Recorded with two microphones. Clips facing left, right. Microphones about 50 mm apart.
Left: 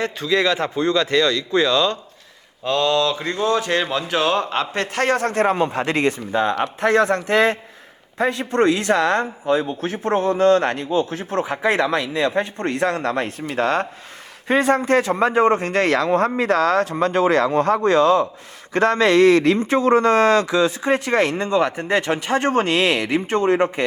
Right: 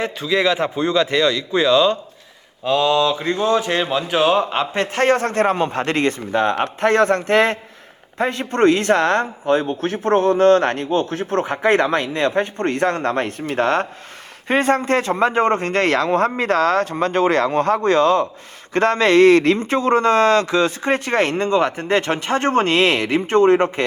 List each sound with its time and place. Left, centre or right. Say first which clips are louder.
0.0 s a man's voice: right 1 dB; centre; by 23.8 s right